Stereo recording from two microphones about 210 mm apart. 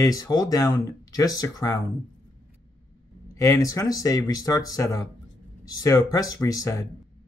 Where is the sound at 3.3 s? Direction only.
15° left (ahead or behind).